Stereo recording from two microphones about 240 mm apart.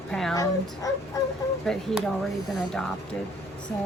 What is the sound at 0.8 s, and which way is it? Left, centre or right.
Speech, centre.